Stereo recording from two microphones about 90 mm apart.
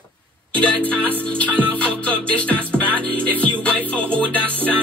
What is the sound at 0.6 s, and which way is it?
Music, 15° left (ahead or behind).